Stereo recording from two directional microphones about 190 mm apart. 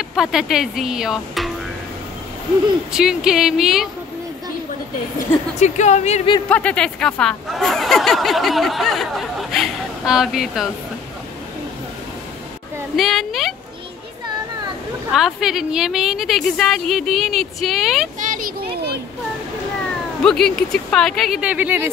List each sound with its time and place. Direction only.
0.1 s speech: centre (ahead or behind)
2.9 s a woman's voice: 5° right (ahead or behind)
5.6 s a woman's voice: 40° left (ahead or behind)
6.5 s speech: 5° left (ahead or behind)
12.9 s a woman's voice: centre (ahead or behind)
15.1 s a woman's voice: centre (ahead or behind)
18.3 s a sound: 50° right (ahead or behind)
20.2 s a woman's voice: 5° left (ahead or behind)